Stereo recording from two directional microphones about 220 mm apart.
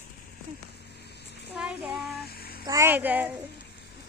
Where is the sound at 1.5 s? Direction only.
5° right (ahead or behind).